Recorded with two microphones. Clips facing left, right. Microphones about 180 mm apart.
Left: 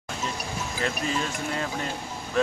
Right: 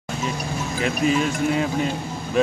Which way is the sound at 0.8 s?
15° right (ahead or behind).